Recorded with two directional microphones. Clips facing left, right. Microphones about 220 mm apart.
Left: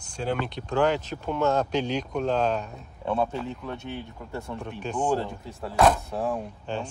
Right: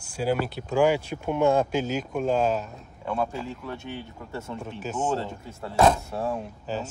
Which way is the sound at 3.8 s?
15° right (ahead or behind).